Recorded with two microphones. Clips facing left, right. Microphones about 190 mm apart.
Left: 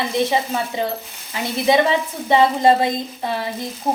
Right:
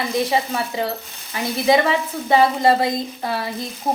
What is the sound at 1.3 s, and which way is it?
A woman's voice, 25° left (ahead or behind).